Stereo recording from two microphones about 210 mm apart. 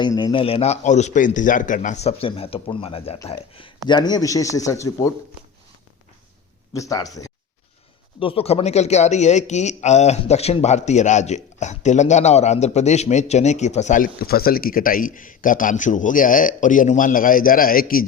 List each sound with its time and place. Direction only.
0.0 s a man's voice: 20° left (ahead or behind)
6.7 s speech: 15° left (ahead or behind)
8.2 s a man's voice: 25° left (ahead or behind); by 18.0 s 45° left (ahead or behind)